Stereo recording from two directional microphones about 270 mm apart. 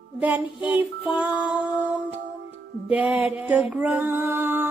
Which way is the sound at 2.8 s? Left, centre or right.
Centre.